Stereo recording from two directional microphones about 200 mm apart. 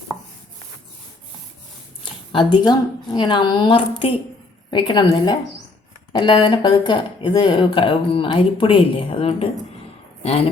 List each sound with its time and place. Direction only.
2.3 s speech: 25° left (ahead or behind)